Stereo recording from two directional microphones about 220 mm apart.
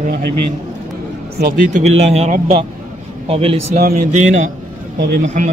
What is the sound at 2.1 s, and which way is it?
A man's voice, 30° right (ahead or behind).